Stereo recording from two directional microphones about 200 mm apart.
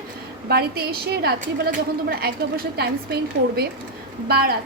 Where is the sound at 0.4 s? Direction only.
50° right (ahead or behind).